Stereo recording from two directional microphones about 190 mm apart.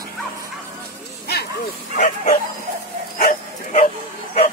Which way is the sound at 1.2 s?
55° left (ahead or behind).